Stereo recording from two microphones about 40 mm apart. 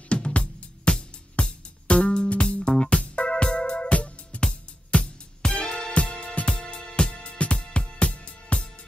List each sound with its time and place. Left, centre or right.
0.1 s music: left